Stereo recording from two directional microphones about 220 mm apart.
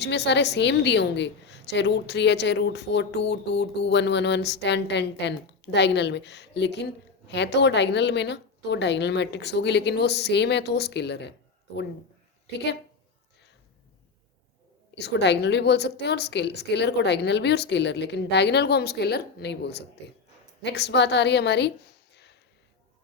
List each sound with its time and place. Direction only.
0.0 s a woman's voice: 50° left (ahead or behind)
14.9 s a woman's voice: 50° left (ahead or behind)
22.1 s a sound: 50° left (ahead or behind)